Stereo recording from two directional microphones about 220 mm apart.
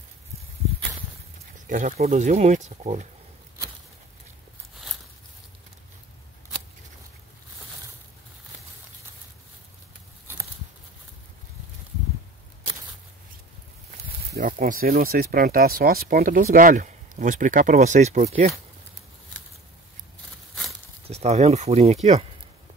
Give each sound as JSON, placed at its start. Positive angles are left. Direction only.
{"t": 1.7, "sound": "speech", "side_deg": -40}
{"t": 14.3, "sound": "speech", "side_deg": -40}
{"t": 21.1, "sound": "speech", "side_deg": -30}